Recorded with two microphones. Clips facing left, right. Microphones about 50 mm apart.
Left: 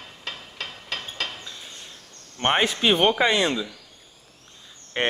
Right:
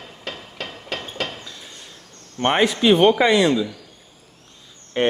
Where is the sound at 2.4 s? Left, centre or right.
Left.